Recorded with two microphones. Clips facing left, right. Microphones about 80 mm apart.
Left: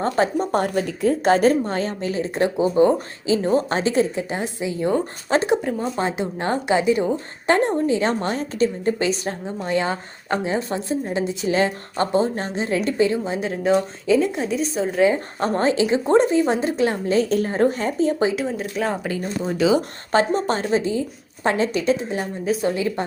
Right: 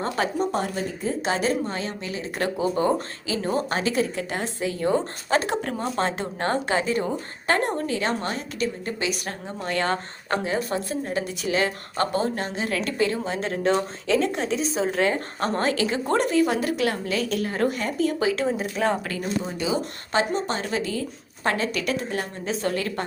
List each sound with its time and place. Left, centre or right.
0.0 s a woman's voice: left
0.5 s a woman's voice: left
2.4 s speech: left
6.0 s a woman's voice: centre; by 9.3 s left
9.6 s speech: centre
13.5 s speech: centre
15.4 s speech: left
18.4 s speech: centre
20.1 s a woman's voice: left
20.7 s a woman's voice: left